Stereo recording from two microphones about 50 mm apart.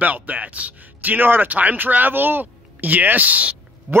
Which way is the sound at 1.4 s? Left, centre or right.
Right.